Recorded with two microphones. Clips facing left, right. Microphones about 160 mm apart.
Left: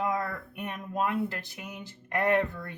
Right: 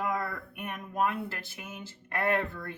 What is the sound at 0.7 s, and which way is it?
Speech, 25° left (ahead or behind).